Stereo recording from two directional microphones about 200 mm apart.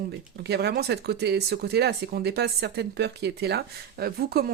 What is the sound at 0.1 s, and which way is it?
Speech, 55° right (ahead or behind).